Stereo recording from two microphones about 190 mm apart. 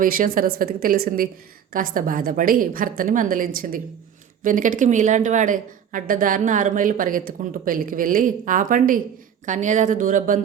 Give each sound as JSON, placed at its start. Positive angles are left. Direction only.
{"t": 0.0, "sound": "a woman's voice", "side_deg": -50}